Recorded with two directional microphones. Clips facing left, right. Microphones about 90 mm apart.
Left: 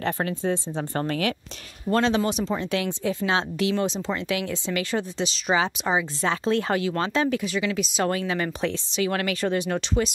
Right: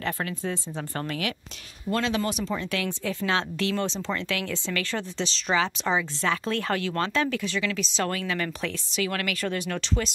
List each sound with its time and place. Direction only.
0.0 s speech: 30° left (ahead or behind)
2.2 s speech: 20° left (ahead or behind)